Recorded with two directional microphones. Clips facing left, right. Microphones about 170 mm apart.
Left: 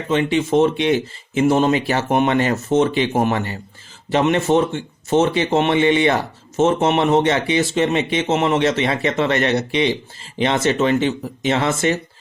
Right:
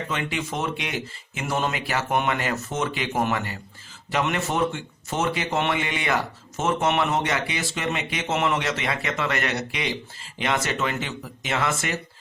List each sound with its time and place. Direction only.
0.1 s speech: 25° left (ahead or behind)